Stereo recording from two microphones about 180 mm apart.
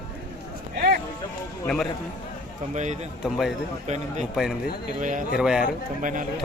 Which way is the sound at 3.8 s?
40° right (ahead or behind).